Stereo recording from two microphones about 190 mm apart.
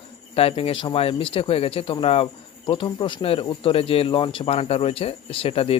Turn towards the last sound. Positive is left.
turn(degrees=30)  # may be behind; listen again after turning